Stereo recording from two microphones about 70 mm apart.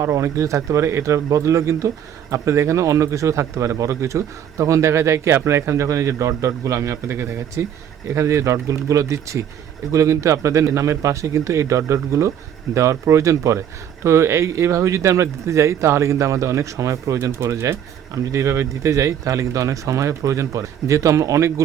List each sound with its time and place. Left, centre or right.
0.0 s speech: right